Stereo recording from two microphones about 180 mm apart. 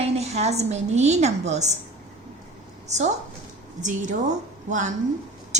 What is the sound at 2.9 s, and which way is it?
A woman's voice, 40° right (ahead or behind).